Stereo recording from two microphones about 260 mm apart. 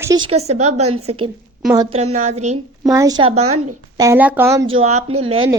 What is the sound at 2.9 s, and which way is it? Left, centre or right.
Speech, centre.